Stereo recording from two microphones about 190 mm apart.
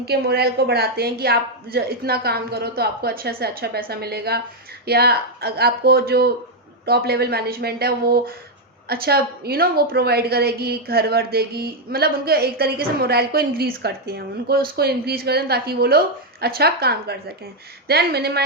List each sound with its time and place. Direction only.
0.0 s a woman's voice: 55° right (ahead or behind)